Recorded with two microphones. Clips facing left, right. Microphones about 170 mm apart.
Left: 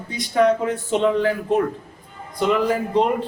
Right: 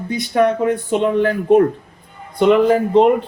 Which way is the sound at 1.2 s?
55° right (ahead or behind).